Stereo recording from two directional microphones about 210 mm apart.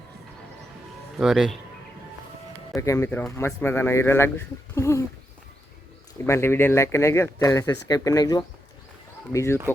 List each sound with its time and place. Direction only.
1.1 s speech: centre (ahead or behind)
2.7 s a man's voice: 15° left (ahead or behind)
6.2 s a man's voice: 10° left (ahead or behind)